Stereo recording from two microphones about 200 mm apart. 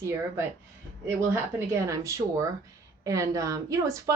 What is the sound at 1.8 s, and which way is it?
Speech, 15° right (ahead or behind).